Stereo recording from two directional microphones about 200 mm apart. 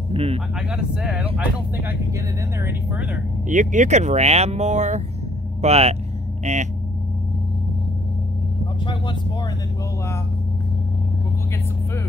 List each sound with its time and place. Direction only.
0.1 s a sound: 30° right (ahead or behind)
0.6 s speech: 5° right (ahead or behind)
3.4 s speech: 40° right (ahead or behind)